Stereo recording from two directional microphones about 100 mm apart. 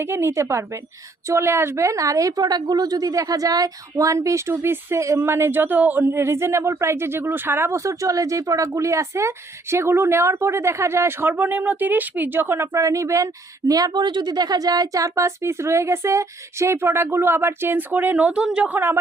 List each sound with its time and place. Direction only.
0.0 s a woman's voice: 25° right (ahead or behind)